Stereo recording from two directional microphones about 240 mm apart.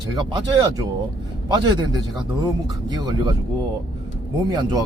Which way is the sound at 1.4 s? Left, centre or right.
Centre.